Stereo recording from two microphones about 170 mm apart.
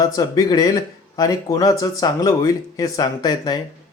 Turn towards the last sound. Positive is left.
turn(degrees=25)  # may be behind; listen again after turning